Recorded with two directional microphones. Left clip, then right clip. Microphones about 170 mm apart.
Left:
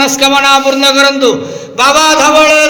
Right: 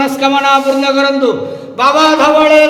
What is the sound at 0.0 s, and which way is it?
Mantra, 15° left (ahead or behind).